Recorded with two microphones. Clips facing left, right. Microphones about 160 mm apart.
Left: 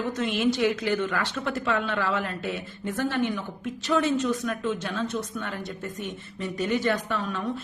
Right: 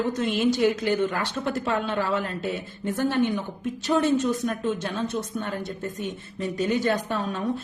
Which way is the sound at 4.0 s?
45° right (ahead or behind).